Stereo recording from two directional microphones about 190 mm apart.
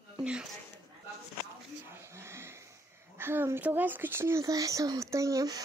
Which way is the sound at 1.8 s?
15° right (ahead or behind).